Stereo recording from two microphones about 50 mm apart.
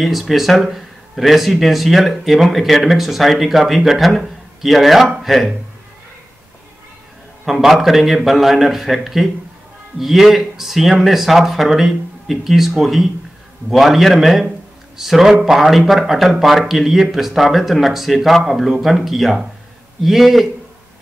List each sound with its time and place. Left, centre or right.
0.0 s speech: centre
7.4 s speech: centre